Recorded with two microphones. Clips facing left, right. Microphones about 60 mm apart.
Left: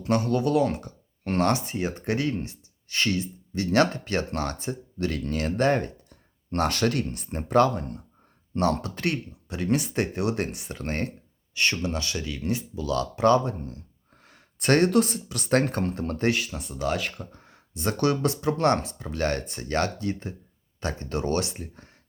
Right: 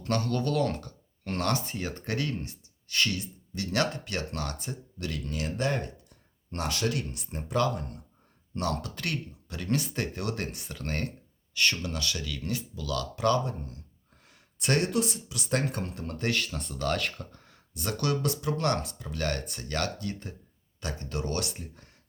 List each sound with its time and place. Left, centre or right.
0.0 s speech: centre
1.2 s speech: left
14.3 s speech: left
16.3 s speech: centre
17.3 s speech: left